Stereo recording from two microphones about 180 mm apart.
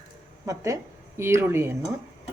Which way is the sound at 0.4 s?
15° right (ahead or behind).